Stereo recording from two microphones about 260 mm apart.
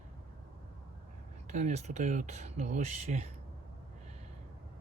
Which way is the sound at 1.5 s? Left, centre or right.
Right.